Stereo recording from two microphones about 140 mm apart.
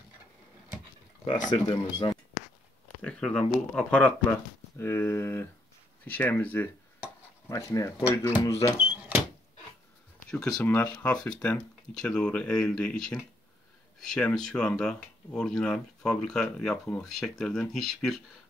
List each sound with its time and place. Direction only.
1.5 s speech: 35° left (ahead or behind)
3.0 s speech: 5° left (ahead or behind)
8.7 s cash register: 10° right (ahead or behind)
10.6 s speech: 10° left (ahead or behind)